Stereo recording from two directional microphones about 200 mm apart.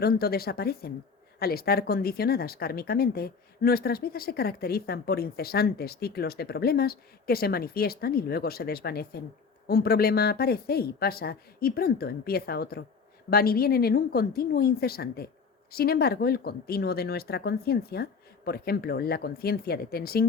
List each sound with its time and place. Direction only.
0.0 s speech: 50° left (ahead or behind)